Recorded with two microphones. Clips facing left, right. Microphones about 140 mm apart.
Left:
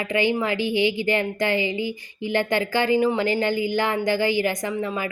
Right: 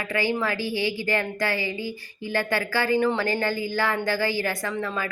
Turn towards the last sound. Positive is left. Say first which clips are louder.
# left 2 dB
turn(degrees=20)  # may be behind; listen again after turning